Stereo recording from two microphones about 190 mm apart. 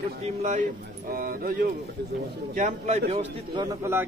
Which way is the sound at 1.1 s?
50° right (ahead or behind).